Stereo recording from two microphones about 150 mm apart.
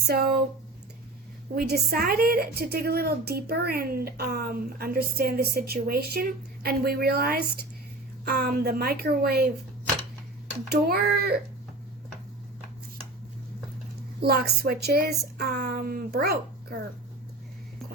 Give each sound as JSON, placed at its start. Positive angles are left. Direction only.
{"t": 0.1, "sound": "a woman's voice", "side_deg": -90}
{"t": 1.5, "sound": "a woman's voice", "side_deg": -90}
{"t": 10.7, "sound": "a woman's voice", "side_deg": -85}
{"t": 14.2, "sound": "a woman's voice", "side_deg": -90}